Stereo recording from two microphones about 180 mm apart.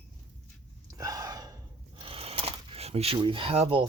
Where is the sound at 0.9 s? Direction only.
20° right (ahead or behind).